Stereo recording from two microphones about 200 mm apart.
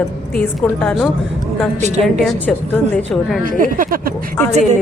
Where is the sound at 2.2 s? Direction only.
10° left (ahead or behind).